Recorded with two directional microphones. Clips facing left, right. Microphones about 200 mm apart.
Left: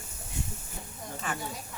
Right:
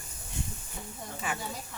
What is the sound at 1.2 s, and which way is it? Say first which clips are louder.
Speech: even; 10° right (ahead or behind).